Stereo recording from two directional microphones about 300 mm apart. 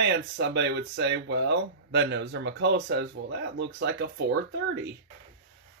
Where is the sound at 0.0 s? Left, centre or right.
Right.